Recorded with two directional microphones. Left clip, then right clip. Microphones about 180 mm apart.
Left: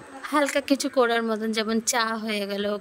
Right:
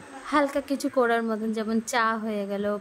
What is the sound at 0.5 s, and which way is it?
Speech, 50° left (ahead or behind).